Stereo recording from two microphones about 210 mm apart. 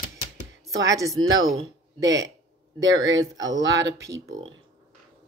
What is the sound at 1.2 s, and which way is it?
Speech, 70° right (ahead or behind).